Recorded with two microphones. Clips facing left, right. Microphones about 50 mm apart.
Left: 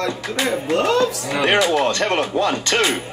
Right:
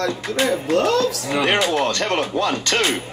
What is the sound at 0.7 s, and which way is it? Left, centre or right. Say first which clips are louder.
Speech: left 1 dB; left.